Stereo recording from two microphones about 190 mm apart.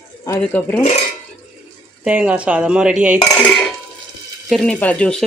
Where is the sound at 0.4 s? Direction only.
10° left (ahead or behind).